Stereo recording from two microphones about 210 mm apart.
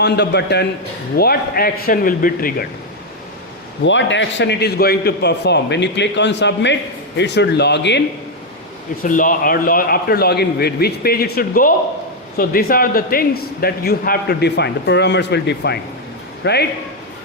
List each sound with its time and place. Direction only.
0.0 s a man's voice: 55° left (ahead or behind)
3.8 s a man's voice: 60° left (ahead or behind)
9.0 s a man's voice: 40° left (ahead or behind)